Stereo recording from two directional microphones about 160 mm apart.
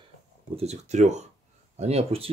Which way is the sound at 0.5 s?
45° right (ahead or behind).